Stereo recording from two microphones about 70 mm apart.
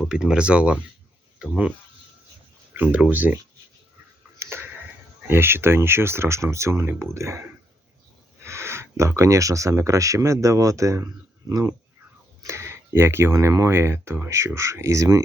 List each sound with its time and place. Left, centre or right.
0.0 s speech: centre
2.7 s speech: right
4.4 s tick-tock: right
5.3 s speech: right
8.4 s speech: right